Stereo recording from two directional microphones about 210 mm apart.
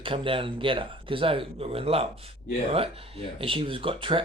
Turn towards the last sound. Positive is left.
turn(degrees=-25)  # may be behind; listen again after turning